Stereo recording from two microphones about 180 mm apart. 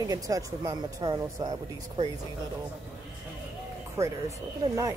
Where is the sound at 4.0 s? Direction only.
15° right (ahead or behind).